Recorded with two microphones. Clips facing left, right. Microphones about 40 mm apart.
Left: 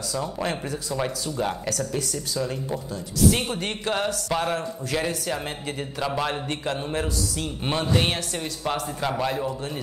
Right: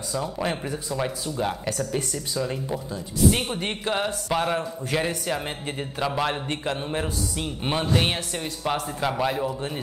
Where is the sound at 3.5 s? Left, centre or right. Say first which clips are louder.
Even; right.